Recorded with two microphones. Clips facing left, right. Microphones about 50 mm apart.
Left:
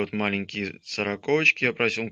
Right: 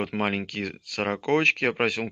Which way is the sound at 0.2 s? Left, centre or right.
Left.